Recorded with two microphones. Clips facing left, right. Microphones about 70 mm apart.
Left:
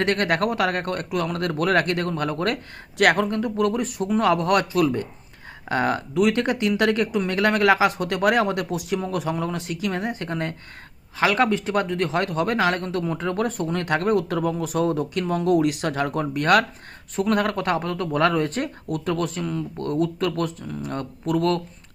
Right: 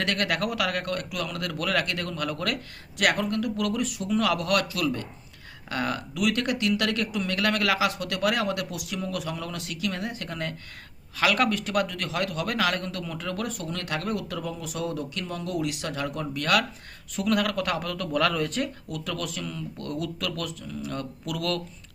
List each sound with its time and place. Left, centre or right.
0.0 s speech: left